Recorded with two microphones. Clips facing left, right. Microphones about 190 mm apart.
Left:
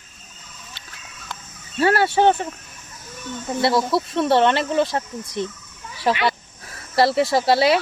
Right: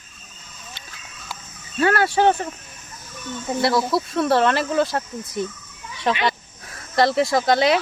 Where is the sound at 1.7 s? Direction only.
30° left (ahead or behind).